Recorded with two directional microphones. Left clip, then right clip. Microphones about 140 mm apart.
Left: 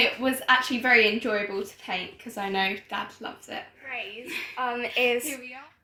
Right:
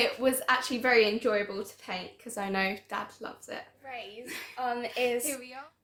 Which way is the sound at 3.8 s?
10° right (ahead or behind).